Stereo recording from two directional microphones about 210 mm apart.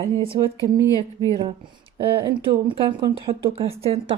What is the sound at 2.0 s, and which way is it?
Speech, 25° right (ahead or behind).